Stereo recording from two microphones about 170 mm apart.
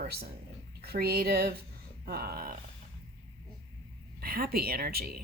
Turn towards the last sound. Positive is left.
turn(degrees=-65)  # may be behind; listen again after turning